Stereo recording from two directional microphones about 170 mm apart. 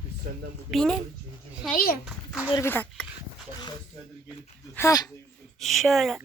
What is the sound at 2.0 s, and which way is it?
Speech, 5° right (ahead or behind).